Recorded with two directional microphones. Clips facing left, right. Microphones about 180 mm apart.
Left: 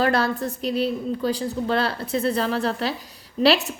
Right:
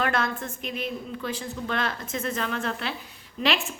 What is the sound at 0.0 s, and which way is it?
A woman's voice, 35° left (ahead or behind).